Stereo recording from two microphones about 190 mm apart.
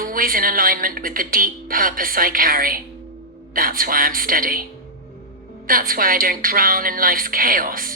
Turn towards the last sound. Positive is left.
turn(degrees=-45)  # may be behind; listen again after turning